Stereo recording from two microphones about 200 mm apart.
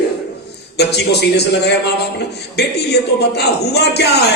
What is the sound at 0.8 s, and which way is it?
A man's voice, 55° left (ahead or behind).